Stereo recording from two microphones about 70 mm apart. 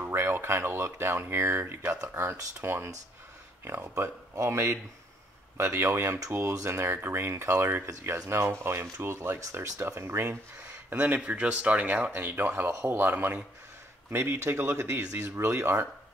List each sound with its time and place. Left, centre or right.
0.0 s speech: right
3.9 s speech: right
10.9 s speech: right